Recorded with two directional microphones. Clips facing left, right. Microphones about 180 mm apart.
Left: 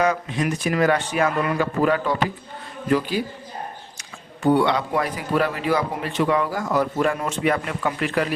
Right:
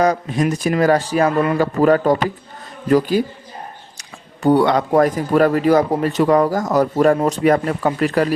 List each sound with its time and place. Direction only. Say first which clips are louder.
0.0 s speech: right 5 dB; 40° right (ahead or behind)
4.4 s speech: right 4 dB; 40° right (ahead or behind)